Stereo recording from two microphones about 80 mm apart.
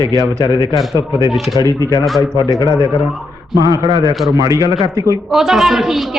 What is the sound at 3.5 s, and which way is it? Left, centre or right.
Speech, right.